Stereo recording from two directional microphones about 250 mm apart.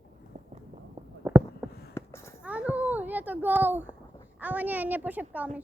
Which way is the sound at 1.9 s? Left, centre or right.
Centre.